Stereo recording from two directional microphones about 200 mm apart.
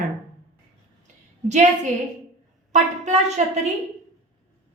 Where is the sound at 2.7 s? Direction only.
35° right (ahead or behind).